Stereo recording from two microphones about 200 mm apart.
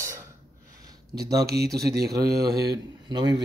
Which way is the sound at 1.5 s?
50° right (ahead or behind).